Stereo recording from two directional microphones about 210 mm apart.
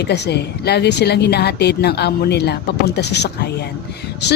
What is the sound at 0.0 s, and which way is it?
A woman's voice, 50° left (ahead or behind).